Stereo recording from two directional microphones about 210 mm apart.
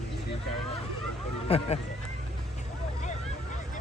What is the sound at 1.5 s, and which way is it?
Speech, 30° left (ahead or behind).